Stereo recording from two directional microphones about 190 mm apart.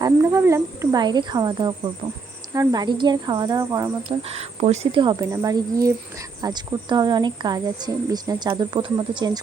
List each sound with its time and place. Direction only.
0.0 s speech: 15° right (ahead or behind)
4.3 s speech: 35° right (ahead or behind)